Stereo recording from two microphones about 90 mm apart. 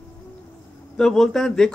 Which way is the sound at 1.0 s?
5° left (ahead or behind).